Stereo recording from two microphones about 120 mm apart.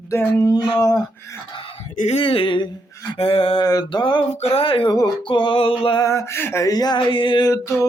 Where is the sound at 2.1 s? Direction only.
50° left (ahead or behind).